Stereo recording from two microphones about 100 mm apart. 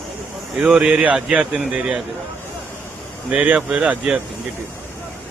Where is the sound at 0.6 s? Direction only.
10° right (ahead or behind).